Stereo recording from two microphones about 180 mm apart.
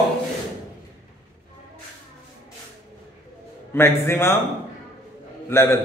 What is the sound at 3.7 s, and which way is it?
Speech, 15° left (ahead or behind).